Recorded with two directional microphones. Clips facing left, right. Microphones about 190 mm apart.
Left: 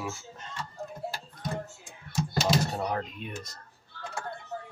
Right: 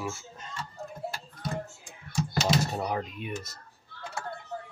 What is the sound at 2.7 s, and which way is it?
Speech, 5° right (ahead or behind).